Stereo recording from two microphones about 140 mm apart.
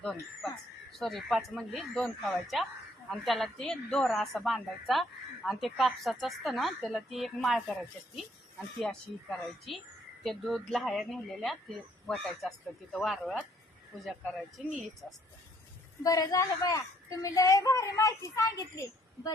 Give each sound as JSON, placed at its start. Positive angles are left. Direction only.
{"t": 0.9, "sound": "a woman's voice", "side_deg": 0}
{"t": 9.7, "sound": "a woman's voice", "side_deg": 0}
{"t": 16.0, "sound": "a woman's voice", "side_deg": 25}